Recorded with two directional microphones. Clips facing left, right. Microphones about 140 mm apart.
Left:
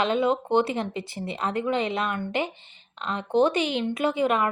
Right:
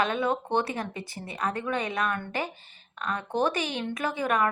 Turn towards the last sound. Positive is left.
turn(degrees=25)  # may be behind; listen again after turning